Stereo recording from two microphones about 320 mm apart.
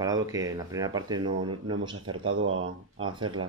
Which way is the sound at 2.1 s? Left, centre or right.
Right.